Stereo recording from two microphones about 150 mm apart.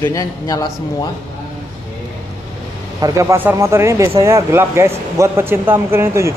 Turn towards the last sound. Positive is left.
turn(degrees=-15)  # may be behind; listen again after turning